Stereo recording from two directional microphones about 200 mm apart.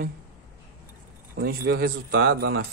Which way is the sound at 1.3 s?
50° right (ahead or behind).